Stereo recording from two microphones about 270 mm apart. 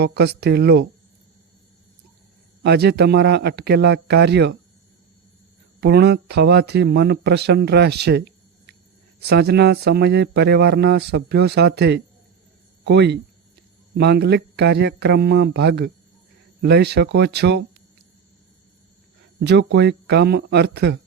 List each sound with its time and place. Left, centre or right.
0.0 s speech: right
2.6 s speech: right
5.8 s speech: right
19.5 s speech: right